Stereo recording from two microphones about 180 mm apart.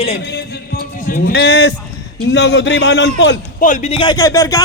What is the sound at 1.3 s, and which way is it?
A man's voice, 75° left (ahead or behind).